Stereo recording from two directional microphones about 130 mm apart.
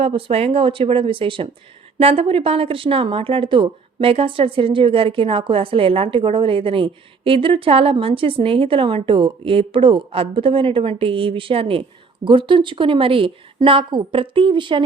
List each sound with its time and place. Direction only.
0.0 s speech: 45° right (ahead or behind)